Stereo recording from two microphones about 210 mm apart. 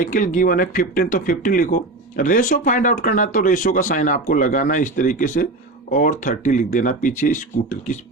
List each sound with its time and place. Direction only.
0.0 s speech: 40° left (ahead or behind)